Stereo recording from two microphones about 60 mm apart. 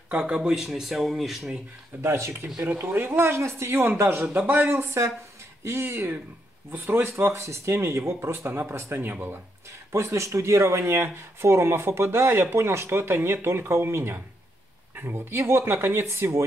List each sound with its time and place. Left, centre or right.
0.1 s speech: centre
2.0 s speech: right
2.6 s speech: right
7.4 s speech: right
9.9 s speech: right